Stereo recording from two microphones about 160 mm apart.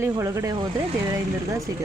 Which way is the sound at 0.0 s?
15° right (ahead or behind).